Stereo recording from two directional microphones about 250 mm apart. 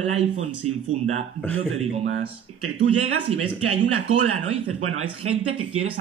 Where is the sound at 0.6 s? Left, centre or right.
Right.